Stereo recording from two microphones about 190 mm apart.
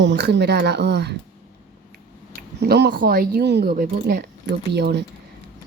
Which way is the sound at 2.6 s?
60° right (ahead or behind).